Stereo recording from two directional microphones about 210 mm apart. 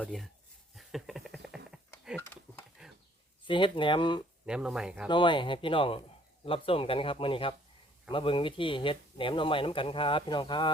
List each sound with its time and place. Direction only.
0.0 s speech: centre (ahead or behind)
0.8 s a sound: centre (ahead or behind)
3.4 s speech: 25° left (ahead or behind)
4.4 s speech: 5° right (ahead or behind)
5.0 s speech: 20° left (ahead or behind)